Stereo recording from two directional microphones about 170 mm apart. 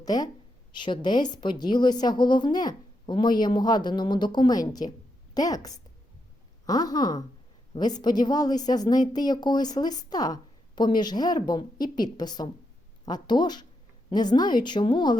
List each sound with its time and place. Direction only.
0.0 s a woman's voice: 25° left (ahead or behind)